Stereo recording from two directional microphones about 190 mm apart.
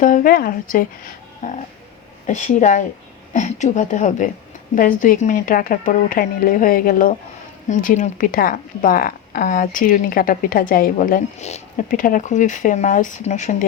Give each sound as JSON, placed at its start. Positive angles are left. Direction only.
{"t": 0.0, "sound": "a woman's voice", "side_deg": 45}
{"t": 2.2, "sound": "a woman's voice", "side_deg": 40}